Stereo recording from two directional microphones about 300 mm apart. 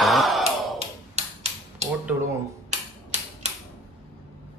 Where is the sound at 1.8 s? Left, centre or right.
Right.